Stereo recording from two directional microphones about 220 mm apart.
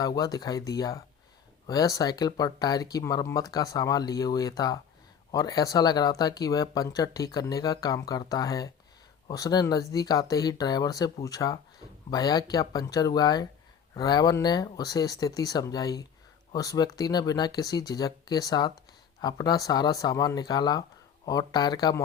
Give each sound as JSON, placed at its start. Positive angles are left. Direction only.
{"t": 0.0, "sound": "speech", "side_deg": 15}